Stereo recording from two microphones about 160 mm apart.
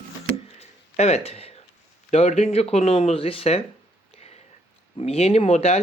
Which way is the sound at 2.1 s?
40° left (ahead or behind).